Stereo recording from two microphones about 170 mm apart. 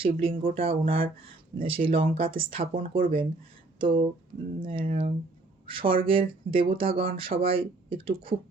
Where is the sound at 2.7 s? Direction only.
55° right (ahead or behind).